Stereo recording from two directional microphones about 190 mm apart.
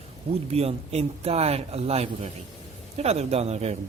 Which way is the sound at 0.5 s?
30° right (ahead or behind).